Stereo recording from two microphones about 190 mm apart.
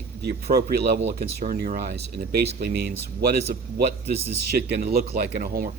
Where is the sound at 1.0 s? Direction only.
45° right (ahead or behind).